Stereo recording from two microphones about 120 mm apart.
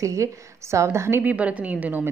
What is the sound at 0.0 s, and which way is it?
Speech, 25° right (ahead or behind).